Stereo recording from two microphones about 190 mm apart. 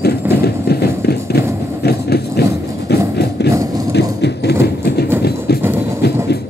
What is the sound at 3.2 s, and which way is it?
Horse, 60° left (ahead or behind).